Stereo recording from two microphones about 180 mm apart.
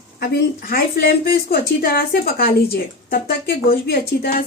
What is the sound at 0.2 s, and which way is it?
A woman's voice, 55° left (ahead or behind).